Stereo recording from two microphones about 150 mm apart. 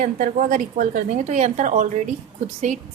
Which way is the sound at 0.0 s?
60° right (ahead or behind).